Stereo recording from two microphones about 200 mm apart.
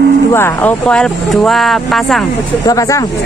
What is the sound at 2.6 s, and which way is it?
Speech, 15° left (ahead or behind).